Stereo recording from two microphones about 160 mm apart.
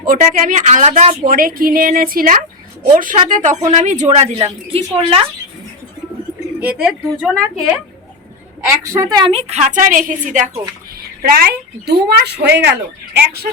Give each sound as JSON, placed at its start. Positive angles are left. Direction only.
{"t": 0.0, "sound": "a woman's voice", "side_deg": -60}
{"t": 1.2, "sound": "a woman's voice", "side_deg": -60}
{"t": 6.6, "sound": "speech", "side_deg": -10}
{"t": 8.6, "sound": "a woman's voice", "side_deg": -20}
{"t": 9.3, "sound": "a woman's voice", "side_deg": -40}
{"t": 11.2, "sound": "a woman's voice", "side_deg": -70}